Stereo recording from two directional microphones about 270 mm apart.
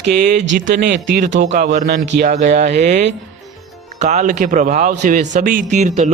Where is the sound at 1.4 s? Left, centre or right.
Right.